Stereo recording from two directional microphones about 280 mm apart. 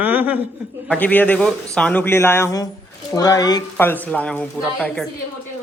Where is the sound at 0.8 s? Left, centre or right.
Centre.